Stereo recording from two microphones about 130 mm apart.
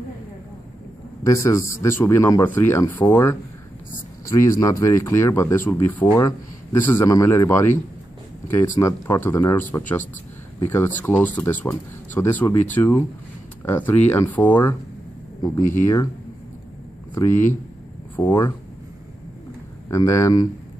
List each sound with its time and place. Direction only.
1.2 s speech: 25° left (ahead or behind)
15.8 s speech: 25° left (ahead or behind)
17.1 s speech: 20° left (ahead or behind)
19.9 s speech: 20° left (ahead or behind)